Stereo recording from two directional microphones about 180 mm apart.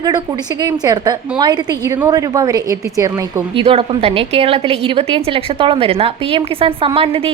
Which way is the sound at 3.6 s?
30° right (ahead or behind).